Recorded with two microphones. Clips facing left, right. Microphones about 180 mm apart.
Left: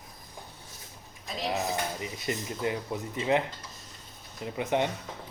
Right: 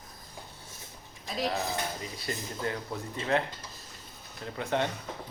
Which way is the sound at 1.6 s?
20° left (ahead or behind).